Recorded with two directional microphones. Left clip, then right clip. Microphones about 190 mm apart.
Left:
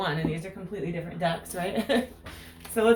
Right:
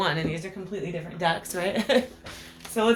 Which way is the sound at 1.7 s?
40° right (ahead or behind).